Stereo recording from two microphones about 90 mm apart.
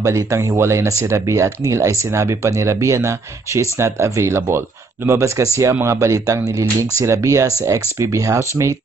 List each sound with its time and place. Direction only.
0.0 s speech: 35° right (ahead or behind)